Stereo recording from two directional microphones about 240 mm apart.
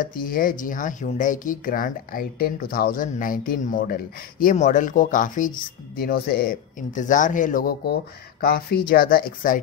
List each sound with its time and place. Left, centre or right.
0.0 s speech: left